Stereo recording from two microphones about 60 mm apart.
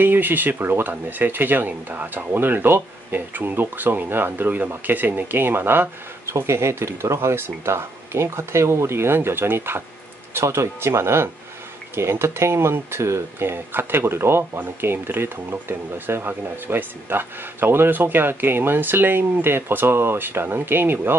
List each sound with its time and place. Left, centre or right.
0.0 s speech: right